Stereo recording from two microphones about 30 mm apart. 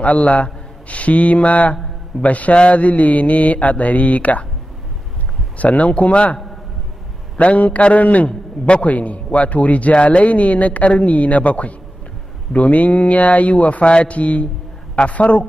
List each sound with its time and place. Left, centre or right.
0.0 s a man's voice: left
2.2 s mantra: left
5.6 s speech: left
7.3 s speech: left